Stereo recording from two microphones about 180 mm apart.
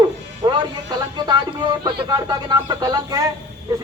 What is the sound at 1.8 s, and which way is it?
A man's voice, 20° right (ahead or behind).